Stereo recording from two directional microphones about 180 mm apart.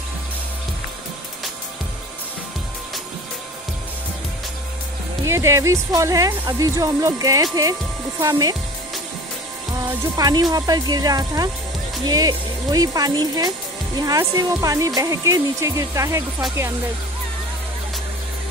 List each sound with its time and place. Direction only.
5.2 s speech: 15° right (ahead or behind)
9.8 s speech: 20° right (ahead or behind)